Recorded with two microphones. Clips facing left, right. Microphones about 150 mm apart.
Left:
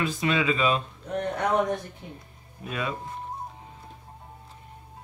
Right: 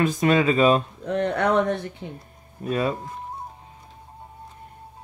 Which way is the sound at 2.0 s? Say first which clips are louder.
Right 6 dB; 90° right.